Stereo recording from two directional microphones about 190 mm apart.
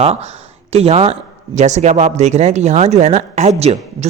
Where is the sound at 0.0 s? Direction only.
35° right (ahead or behind).